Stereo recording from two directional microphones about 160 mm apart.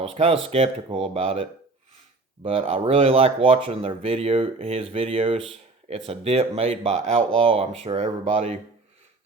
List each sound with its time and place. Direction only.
0.0 s speech: 35° right (ahead or behind)